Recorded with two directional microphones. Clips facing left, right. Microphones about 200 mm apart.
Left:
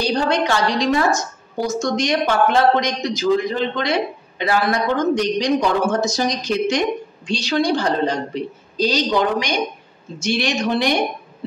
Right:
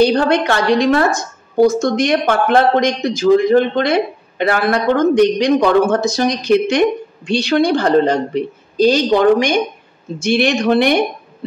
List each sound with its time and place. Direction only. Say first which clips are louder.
0.0 s a woman's voice: right 6 dB; 60° right (ahead or behind)